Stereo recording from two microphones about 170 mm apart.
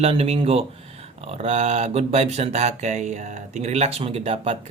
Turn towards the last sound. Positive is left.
turn(degrees=-35)  # may be behind; listen again after turning